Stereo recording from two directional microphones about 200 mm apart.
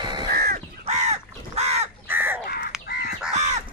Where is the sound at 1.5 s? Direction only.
30° right (ahead or behind).